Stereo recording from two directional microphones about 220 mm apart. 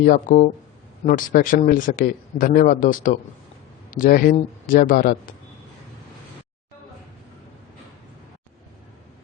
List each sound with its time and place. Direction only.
0.0 s a man's voice: 40° left (ahead or behind)